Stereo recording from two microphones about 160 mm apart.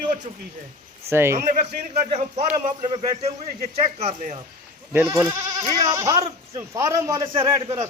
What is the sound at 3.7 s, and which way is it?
Speech, 40° right (ahead or behind).